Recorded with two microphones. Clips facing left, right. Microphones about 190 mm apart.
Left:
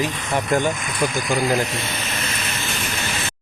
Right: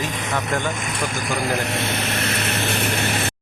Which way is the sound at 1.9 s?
65° right (ahead or behind).